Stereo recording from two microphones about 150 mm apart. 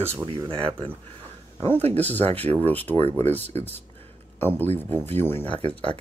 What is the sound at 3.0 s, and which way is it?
Speech, 45° right (ahead or behind).